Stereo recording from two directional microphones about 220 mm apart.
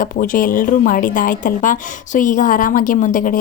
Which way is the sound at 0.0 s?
40° left (ahead or behind).